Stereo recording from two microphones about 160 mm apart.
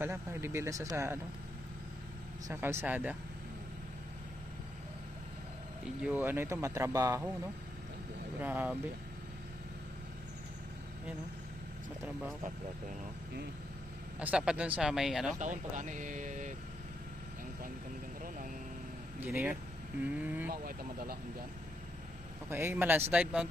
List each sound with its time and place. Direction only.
0.0 s speech: 15° right (ahead or behind)
2.5 s speech: 15° right (ahead or behind)
5.8 s speech: 5° right (ahead or behind)
14.2 s speech: 5° right (ahead or behind)
15.3 s speech: 50° right (ahead or behind)
18.2 s vehicle: 60° right (ahead or behind)
19.2 s speech: 15° right (ahead or behind)
20.5 s speech: 65° right (ahead or behind)
22.4 s speech: 15° right (ahead or behind)